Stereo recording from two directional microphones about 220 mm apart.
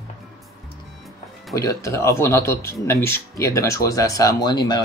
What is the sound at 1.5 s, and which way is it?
Speech, 15° left (ahead or behind).